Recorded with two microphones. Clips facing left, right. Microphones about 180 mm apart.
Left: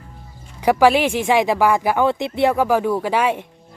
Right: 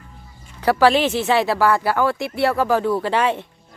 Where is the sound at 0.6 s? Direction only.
15° left (ahead or behind).